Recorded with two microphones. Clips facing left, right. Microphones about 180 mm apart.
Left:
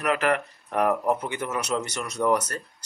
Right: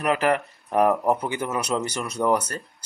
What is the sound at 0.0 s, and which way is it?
Speech, 30° right (ahead or behind).